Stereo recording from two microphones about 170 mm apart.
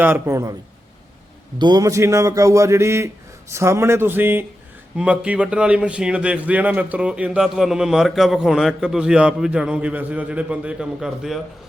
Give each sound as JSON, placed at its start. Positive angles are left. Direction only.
{"t": 0.0, "sound": "speech", "side_deg": -15}
{"t": 1.5, "sound": "a man's voice", "side_deg": -25}